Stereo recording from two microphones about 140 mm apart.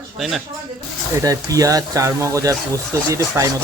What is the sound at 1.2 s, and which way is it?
Speech, 25° right (ahead or behind).